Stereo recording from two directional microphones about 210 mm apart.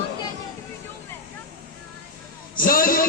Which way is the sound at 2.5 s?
45° left (ahead or behind).